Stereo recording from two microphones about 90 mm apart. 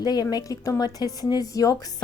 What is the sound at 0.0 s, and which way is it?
Speech, 45° left (ahead or behind).